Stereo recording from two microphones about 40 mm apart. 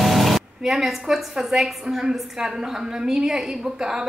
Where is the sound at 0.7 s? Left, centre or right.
Centre.